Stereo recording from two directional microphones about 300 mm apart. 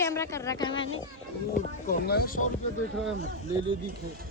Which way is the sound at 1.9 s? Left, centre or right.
Left.